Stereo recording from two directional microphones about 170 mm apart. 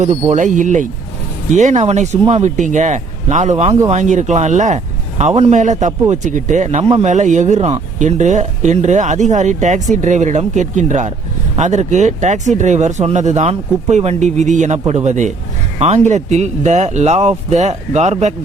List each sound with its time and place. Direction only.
0.1 s a man's voice: 45° right (ahead or behind)